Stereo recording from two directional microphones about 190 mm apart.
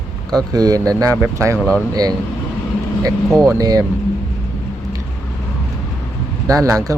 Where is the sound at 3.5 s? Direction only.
20° right (ahead or behind).